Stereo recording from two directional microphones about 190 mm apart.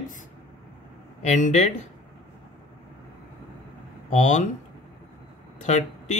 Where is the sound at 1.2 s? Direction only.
35° left (ahead or behind).